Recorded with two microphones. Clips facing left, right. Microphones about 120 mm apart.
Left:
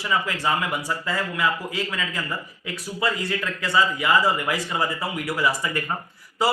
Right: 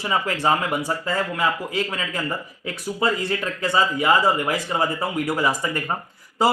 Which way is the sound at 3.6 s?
30° right (ahead or behind).